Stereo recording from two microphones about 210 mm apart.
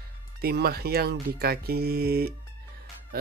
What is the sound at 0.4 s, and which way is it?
Speech, 45° right (ahead or behind).